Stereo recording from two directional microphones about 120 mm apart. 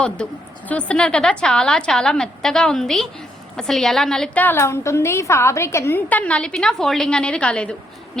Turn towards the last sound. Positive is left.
turn(degrees=10)  # may be behind; listen again after turning